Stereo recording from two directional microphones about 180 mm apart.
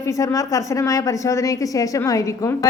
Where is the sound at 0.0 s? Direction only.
15° left (ahead or behind).